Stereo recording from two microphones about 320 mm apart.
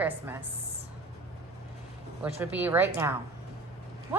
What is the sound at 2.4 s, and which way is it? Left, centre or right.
Speech, centre.